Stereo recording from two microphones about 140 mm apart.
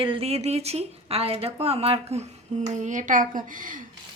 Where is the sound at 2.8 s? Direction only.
65° right (ahead or behind).